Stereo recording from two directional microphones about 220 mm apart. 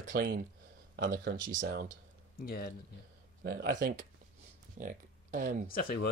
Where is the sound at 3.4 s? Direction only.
45° right (ahead or behind).